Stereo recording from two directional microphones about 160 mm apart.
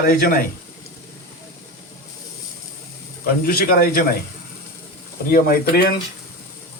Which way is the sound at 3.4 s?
70° left (ahead or behind).